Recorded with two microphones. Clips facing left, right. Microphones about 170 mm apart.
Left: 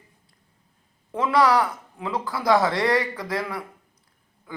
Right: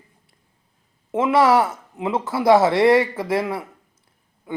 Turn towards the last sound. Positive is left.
turn(degrees=-25)  # may be behind; listen again after turning